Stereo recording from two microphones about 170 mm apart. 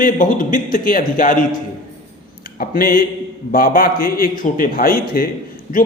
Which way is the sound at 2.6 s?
55° left (ahead or behind).